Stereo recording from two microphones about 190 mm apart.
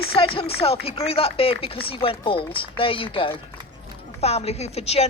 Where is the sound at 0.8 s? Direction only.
30° left (ahead or behind).